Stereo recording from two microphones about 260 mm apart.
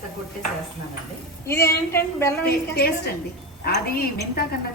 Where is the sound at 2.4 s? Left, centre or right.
Left.